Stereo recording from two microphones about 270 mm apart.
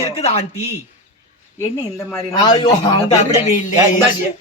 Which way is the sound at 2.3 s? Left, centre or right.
Centre.